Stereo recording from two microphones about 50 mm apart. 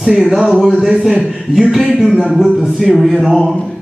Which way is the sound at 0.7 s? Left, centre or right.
Centre.